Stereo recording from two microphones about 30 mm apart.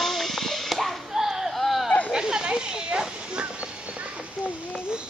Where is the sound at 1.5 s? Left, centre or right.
Centre.